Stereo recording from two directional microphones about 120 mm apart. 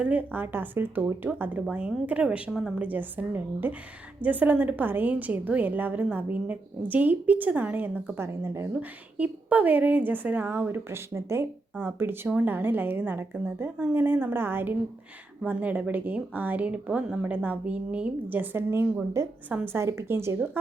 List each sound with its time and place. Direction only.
0.0 s a woman's voice: 15° right (ahead or behind)